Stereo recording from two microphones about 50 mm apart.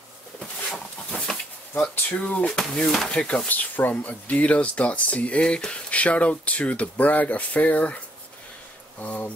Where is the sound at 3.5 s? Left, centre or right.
Left.